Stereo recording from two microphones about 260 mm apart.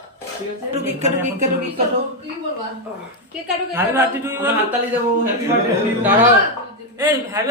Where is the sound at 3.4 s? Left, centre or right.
Centre.